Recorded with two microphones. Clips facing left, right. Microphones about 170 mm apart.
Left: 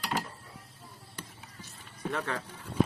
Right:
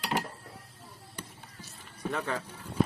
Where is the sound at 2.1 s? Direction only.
5° right (ahead or behind).